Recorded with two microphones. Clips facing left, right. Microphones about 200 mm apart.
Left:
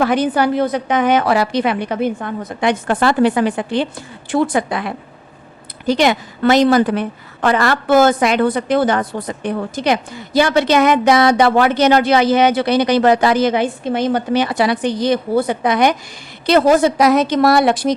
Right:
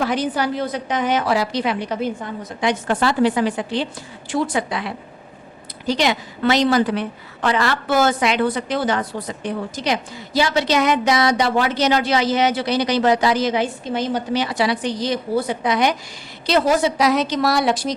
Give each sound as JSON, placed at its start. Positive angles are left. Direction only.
{"t": 0.0, "sound": "a woman's voice", "side_deg": 55}